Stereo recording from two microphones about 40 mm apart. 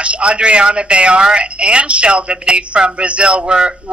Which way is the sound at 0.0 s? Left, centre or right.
Right.